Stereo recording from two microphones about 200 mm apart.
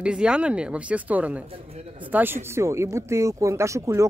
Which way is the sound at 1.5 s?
30° right (ahead or behind).